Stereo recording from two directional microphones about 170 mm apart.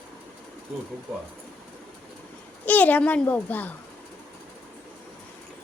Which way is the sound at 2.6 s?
10° left (ahead or behind).